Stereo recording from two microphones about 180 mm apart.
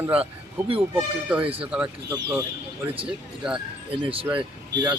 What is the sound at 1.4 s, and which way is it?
Speech, 30° right (ahead or behind).